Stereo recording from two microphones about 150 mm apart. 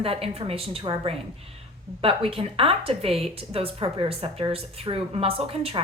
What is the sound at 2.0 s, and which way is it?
Speech, 40° right (ahead or behind).